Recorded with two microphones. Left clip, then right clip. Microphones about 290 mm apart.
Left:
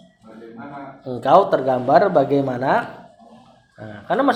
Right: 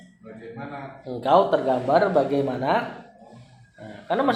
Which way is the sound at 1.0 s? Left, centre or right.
Left.